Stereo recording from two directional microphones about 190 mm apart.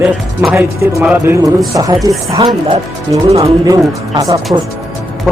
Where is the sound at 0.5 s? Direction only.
15° right (ahead or behind).